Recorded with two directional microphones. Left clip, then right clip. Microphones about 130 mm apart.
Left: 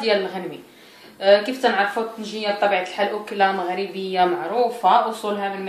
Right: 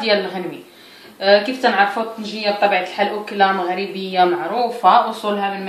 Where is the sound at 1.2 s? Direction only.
30° left (ahead or behind).